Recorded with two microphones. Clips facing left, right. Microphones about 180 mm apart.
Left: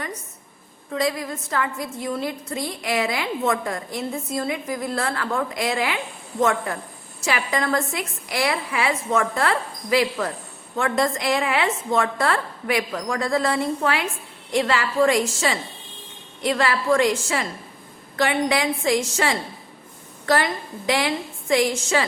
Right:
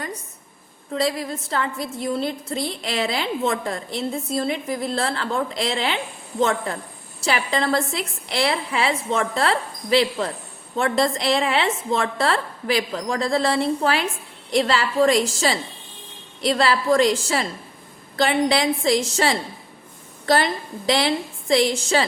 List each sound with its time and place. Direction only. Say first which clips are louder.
0.9 s a woman's voice: right 1 dB; 30° right (ahead or behind)